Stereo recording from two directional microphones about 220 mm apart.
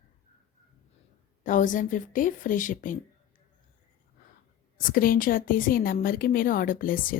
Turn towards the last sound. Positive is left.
turn(degrees=40)  # may be behind; listen again after turning